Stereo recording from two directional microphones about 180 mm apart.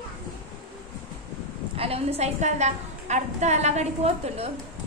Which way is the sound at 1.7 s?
35° right (ahead or behind).